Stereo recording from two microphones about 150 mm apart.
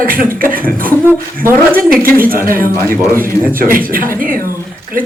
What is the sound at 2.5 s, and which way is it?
Speech, 70° right (ahead or behind).